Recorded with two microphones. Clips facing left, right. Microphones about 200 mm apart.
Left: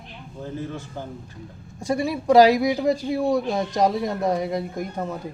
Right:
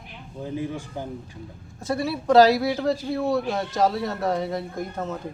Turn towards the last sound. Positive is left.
turn(degrees=10)  # may be behind; listen again after turning